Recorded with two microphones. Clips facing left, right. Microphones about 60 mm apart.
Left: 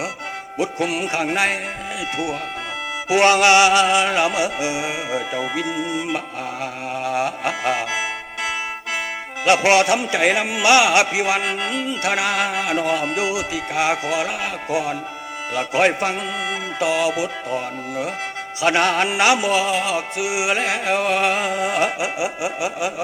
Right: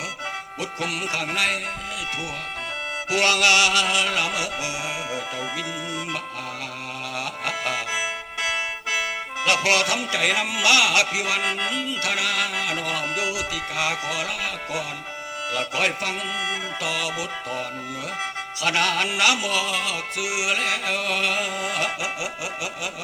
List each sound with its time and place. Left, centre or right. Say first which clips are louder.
0.6 s music: left 7 dB; left
3.1 s music: left 6 dB; left
9.4 s music: left 6 dB; left